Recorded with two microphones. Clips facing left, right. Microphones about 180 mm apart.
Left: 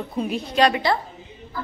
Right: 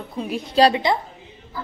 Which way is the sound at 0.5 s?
35° right (ahead or behind).